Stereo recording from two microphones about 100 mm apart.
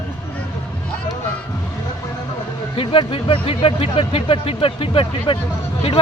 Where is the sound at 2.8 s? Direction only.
60° left (ahead or behind).